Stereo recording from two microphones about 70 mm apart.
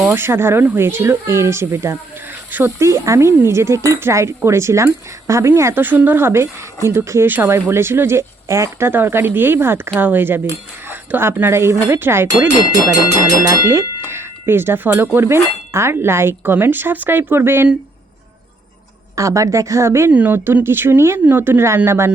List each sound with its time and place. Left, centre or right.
0.1 s speech: right
2.5 s speech: right
2.7 s speech: right
5.8 s speech: right
7.3 s speech: right
8.9 s speech: right
13.5 s speech: right
19.1 s speech: right
20.1 s speech: right